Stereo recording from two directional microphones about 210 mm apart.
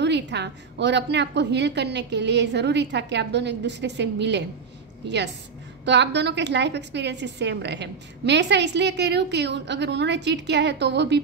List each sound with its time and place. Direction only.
0.0 s a woman's voice: 55° right (ahead or behind)